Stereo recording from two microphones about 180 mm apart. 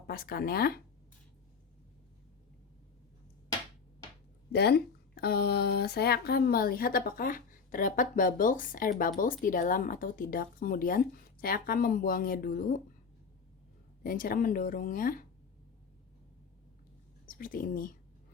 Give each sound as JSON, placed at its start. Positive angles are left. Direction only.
{"t": 0.1, "sound": "speech", "side_deg": 55}
{"t": 4.5, "sound": "speech", "side_deg": 65}
{"t": 14.0, "sound": "speech", "side_deg": 55}
{"t": 17.2, "sound": "speech", "side_deg": 50}